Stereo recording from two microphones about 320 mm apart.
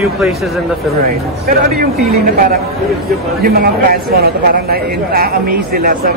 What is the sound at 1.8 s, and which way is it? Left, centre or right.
Speech, right.